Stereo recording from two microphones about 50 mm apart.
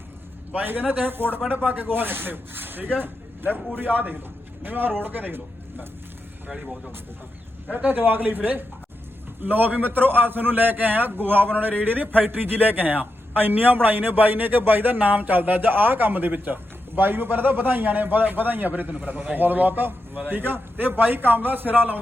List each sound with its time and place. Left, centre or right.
0.5 s speech: right
7.9 s speech: right